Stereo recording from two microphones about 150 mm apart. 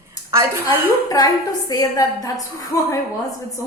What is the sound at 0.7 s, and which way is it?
A woman's voice, 25° left (ahead or behind).